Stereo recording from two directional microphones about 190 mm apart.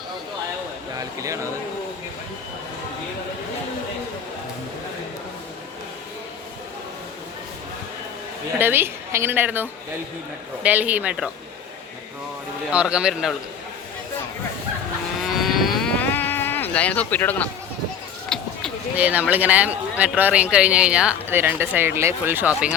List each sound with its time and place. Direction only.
0.9 s speech: 15° right (ahead or behind)
8.5 s speech: 10° right (ahead or behind)
12.7 s a man's voice: 5° right (ahead or behind)
15.2 s vehicle: centre (ahead or behind)
18.3 s run: centre (ahead or behind)
19.3 s speech: 10° right (ahead or behind)